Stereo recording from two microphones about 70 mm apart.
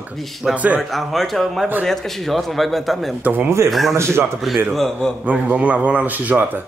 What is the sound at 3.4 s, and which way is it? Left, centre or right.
Speech, right.